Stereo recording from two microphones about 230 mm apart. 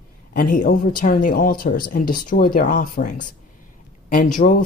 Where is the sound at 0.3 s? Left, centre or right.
Left.